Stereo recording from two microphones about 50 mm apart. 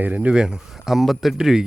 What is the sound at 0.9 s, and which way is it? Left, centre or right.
Speech, centre.